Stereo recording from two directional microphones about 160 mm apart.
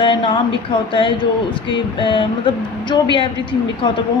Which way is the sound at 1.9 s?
30° left (ahead or behind).